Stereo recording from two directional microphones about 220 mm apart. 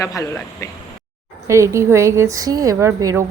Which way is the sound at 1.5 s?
15° right (ahead or behind).